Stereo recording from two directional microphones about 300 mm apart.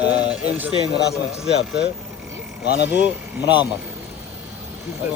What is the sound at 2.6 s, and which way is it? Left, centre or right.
Speech, left.